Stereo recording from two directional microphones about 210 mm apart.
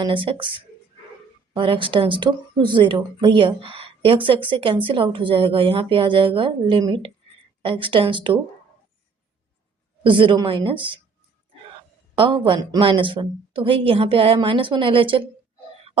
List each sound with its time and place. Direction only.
0.0 s speech: 25° right (ahead or behind)
10.0 s speech: 25° right (ahead or behind)
12.1 s speech: 25° right (ahead or behind)